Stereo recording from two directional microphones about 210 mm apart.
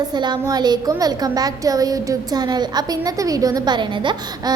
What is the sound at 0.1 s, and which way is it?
A woman's voice, 20° right (ahead or behind).